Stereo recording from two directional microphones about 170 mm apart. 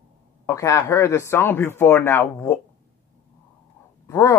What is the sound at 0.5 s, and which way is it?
Speech, 20° left (ahead or behind).